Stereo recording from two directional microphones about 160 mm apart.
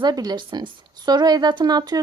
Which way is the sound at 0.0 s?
25° right (ahead or behind).